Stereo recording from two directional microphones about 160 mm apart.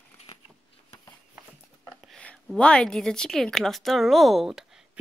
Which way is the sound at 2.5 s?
5° left (ahead or behind).